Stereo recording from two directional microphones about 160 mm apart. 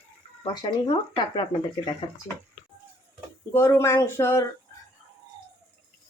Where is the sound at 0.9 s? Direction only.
30° left (ahead or behind).